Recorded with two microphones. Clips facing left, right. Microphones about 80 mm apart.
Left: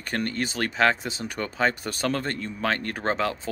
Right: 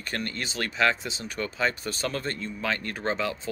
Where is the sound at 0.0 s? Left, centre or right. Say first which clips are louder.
Left 5 dB; left.